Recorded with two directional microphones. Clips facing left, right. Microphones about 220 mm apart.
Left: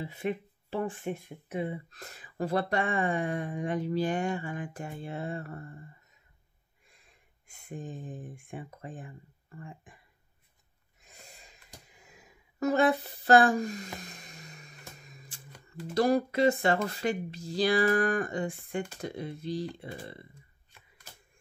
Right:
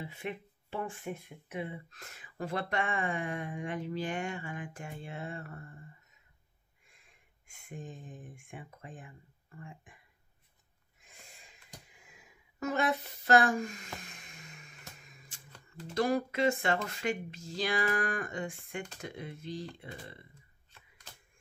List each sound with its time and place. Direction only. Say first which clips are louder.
0.0 s speech: left 7 dB; 35° left (ahead or behind)
7.4 s speech: left 4 dB; 35° left (ahead or behind)
11.0 s a sound: left 4 dB; 40° left (ahead or behind)
15.9 s speech: left 5 dB; 35° left (ahead or behind)